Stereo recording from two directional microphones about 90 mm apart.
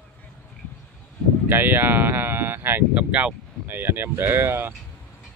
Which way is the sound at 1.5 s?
25° right (ahead or behind).